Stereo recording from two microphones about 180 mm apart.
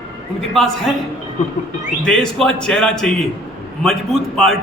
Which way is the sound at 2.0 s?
5° left (ahead or behind).